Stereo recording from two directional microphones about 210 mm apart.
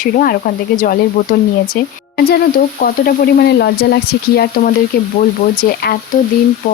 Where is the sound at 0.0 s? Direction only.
45° left (ahead or behind).